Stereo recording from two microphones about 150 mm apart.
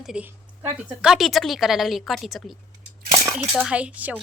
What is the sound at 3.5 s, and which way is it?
Speech, 5° right (ahead or behind).